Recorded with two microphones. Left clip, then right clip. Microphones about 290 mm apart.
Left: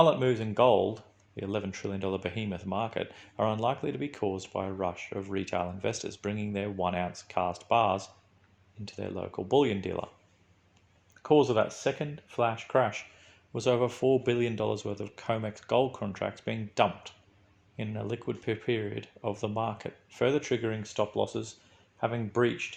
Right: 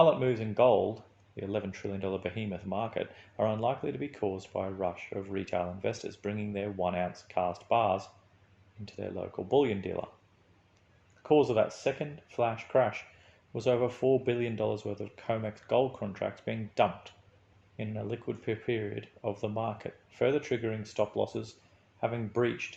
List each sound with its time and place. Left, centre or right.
0.0 s speech: left
11.2 s speech: left